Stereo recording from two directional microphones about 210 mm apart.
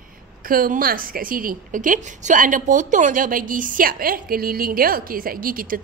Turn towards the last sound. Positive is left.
turn(degrees=-40)  # may be behind; listen again after turning